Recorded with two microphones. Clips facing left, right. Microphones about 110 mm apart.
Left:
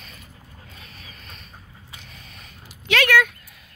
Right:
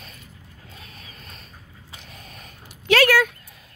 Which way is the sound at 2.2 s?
45° right (ahead or behind).